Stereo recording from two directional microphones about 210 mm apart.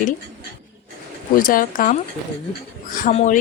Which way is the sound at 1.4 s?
40° left (ahead or behind).